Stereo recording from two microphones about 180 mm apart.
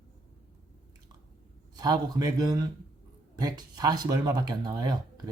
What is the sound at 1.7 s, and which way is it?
Speech, 20° right (ahead or behind).